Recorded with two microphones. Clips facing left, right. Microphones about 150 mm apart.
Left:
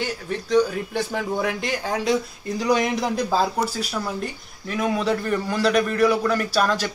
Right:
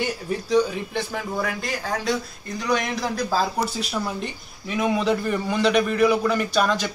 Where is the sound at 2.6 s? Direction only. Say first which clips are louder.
Left 3 dB; 25° left (ahead or behind).